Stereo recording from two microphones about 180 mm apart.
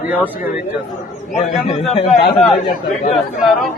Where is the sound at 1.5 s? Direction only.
35° left (ahead or behind).